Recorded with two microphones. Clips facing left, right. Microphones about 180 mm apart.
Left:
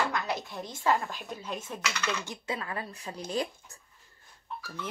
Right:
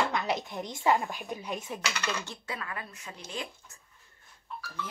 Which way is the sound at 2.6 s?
30° left (ahead or behind).